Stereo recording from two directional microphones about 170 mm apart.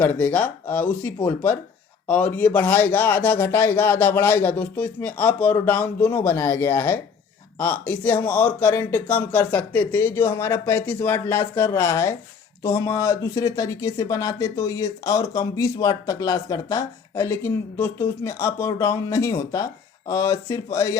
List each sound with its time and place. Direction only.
0.0 s speech: 10° left (ahead or behind)